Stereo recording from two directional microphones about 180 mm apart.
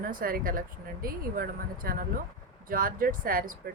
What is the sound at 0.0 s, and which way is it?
Speech, 50° right (ahead or behind).